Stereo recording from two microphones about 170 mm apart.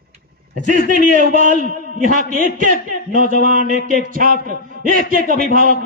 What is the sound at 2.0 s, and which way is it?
A man's voice, 55° right (ahead or behind).